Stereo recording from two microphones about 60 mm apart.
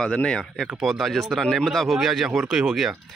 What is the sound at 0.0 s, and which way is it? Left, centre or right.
Speech, centre.